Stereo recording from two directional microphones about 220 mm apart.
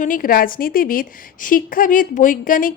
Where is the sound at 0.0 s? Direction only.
40° left (ahead or behind).